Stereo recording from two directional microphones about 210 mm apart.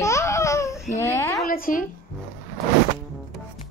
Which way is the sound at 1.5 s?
40° left (ahead or behind).